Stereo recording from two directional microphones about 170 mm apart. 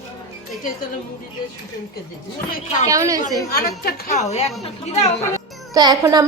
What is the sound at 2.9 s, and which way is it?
Speech, 20° right (ahead or behind).